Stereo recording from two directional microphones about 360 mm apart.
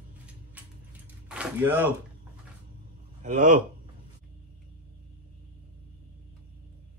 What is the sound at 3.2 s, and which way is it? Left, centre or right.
Speech, centre.